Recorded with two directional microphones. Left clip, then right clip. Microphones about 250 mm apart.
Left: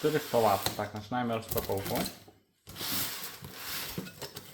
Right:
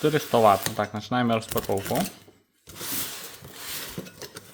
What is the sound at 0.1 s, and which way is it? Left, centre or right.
Speech, right.